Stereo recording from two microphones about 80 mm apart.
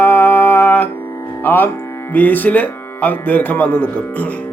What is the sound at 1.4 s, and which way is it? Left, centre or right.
Speech, left.